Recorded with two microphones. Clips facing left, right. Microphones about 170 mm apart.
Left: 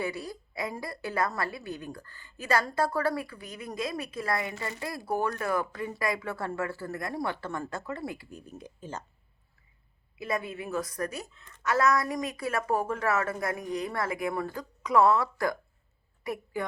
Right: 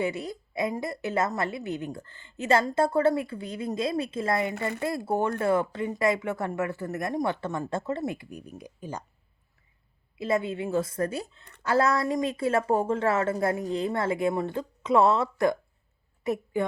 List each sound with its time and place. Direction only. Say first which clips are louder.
0.0 s a woman's voice: right 4 dB; 20° right (ahead or behind)
10.2 s a woman's voice: right 6 dB; 25° right (ahead or behind)